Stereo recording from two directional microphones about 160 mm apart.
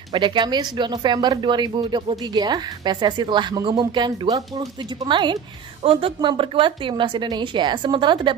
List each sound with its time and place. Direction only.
0.1 s speech: 30° right (ahead or behind)